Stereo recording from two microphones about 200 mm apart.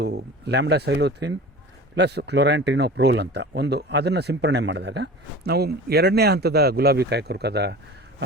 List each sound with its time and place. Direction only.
0.0 s speech: 55° right (ahead or behind)